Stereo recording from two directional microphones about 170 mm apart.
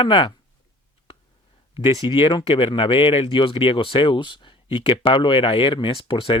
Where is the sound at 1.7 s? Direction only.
30° left (ahead or behind).